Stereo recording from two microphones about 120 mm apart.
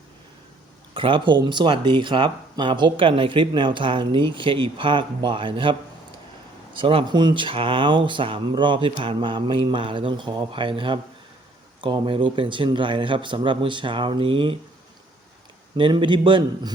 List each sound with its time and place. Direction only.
0.9 s speech: 45° right (ahead or behind)
6.7 s speech: 45° right (ahead or behind)
15.8 s speech: 40° right (ahead or behind)